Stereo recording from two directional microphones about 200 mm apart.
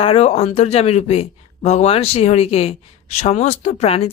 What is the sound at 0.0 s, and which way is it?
Speech, 30° left (ahead or behind).